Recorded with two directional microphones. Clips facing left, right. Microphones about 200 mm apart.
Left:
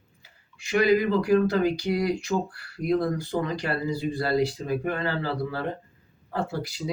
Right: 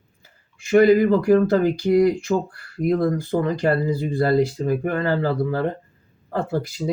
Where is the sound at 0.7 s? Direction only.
50° right (ahead or behind).